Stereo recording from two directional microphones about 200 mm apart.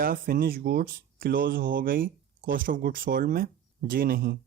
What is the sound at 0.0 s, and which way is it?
Speech, 45° right (ahead or behind).